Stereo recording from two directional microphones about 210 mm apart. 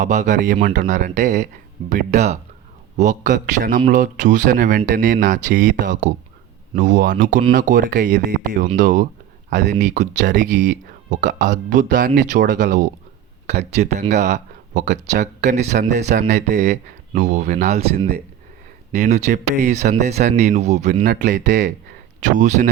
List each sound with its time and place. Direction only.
0.0 s speech: 35° right (ahead or behind)